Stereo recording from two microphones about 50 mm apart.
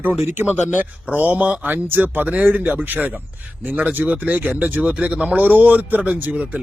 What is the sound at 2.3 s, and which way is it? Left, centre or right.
A man's voice, right.